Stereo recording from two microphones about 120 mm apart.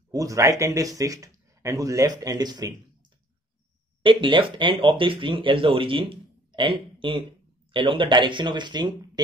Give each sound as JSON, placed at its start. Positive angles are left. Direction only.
{"t": 0.1, "sound": "speech", "side_deg": -25}
{"t": 4.0, "sound": "speech", "side_deg": -45}